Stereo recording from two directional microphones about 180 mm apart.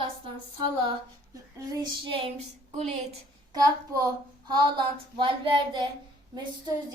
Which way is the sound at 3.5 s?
20° right (ahead or behind).